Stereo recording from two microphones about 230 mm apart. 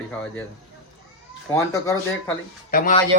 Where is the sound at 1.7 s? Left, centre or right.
Centre.